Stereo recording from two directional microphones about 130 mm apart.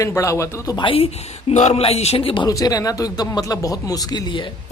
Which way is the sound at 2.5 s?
25° left (ahead or behind).